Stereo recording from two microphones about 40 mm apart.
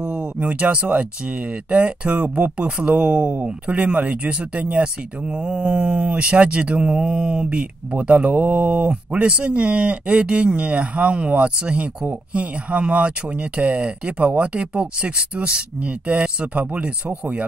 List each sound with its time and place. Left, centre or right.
0.0 s a sound: right
0.4 s speech: right
8.8 s speech: right